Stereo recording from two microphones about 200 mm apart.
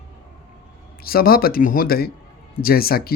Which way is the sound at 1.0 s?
50° left (ahead or behind).